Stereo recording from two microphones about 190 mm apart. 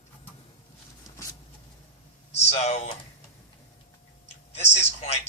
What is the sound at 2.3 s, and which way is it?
Speech, 35° left (ahead or behind).